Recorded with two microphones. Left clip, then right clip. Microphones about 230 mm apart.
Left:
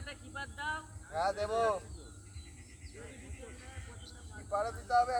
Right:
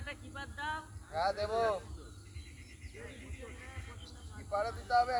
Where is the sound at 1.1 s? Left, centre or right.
Left.